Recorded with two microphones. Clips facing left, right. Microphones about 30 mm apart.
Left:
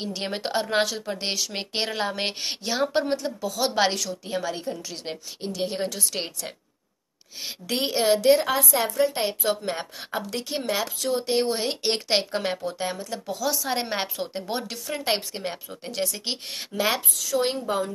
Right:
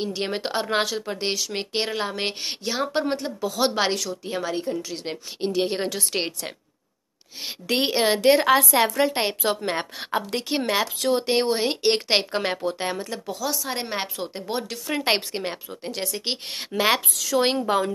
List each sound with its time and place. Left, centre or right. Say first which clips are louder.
0.0 s speech: right 3 dB; centre
3.4 s speech: right 4 dB; right
3.7 s a woman's voice: left 1 dB; centre
5.4 s a woman's voice: right 4 dB; right
8.2 s a woman's voice: right 3 dB; right
11.2 s a woman's voice: left 1 dB; right
11.5 s a woman's voice: right 4 dB; centre
12.1 s speech: right 2 dB; right
13.3 s speech: left 3 dB; centre
15.0 s a woman's voice: right 4 dB; right
15.8 s a woman's voice: left 1 dB; centre
16.7 s a woman's voice: right 4 dB; right
17.1 s speech: right 3 dB; right